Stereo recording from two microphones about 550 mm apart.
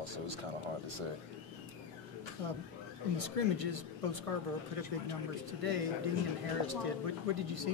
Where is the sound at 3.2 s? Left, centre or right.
Right.